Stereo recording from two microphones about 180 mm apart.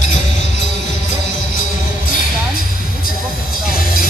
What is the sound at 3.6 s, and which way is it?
Music, 50° left (ahead or behind).